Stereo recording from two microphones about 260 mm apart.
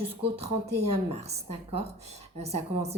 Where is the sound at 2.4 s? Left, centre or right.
Right.